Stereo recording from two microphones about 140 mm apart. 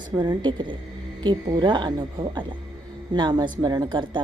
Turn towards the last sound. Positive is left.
turn(degrees=-35)  # may be behind; listen again after turning